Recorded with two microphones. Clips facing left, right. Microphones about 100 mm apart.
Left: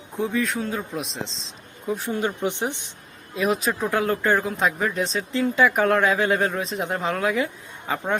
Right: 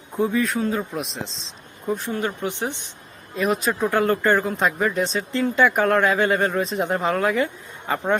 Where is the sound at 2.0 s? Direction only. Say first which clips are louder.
Left 1 dB; 15° left (ahead or behind).